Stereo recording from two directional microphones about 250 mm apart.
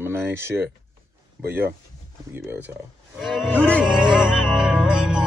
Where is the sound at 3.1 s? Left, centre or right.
Centre.